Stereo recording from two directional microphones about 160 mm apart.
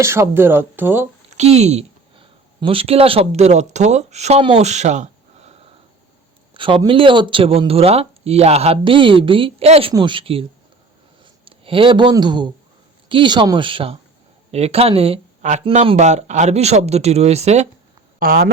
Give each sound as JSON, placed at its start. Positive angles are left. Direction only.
{"t": 0.0, "sound": "speech", "side_deg": -15}
{"t": 1.4, "sound": "a sound", "side_deg": -45}
{"t": 2.6, "sound": "speech", "side_deg": -35}
{"t": 6.5, "sound": "speech", "side_deg": -30}
{"t": 11.4, "sound": "speech", "side_deg": -35}
{"t": 18.2, "sound": "speech", "side_deg": -65}